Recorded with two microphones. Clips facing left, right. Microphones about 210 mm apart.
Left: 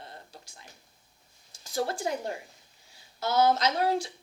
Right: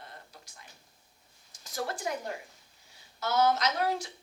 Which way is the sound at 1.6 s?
30° left (ahead or behind).